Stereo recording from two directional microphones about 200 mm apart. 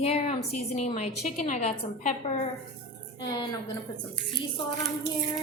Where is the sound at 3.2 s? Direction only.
20° left (ahead or behind).